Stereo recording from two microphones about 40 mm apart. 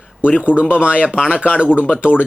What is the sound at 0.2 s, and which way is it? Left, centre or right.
A man's voice, right.